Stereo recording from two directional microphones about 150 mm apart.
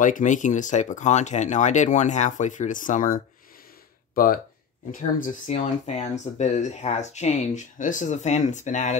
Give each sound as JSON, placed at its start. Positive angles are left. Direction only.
{"t": 0.0, "sound": "speech", "side_deg": 60}
{"t": 5.5, "sound": "speech", "side_deg": 45}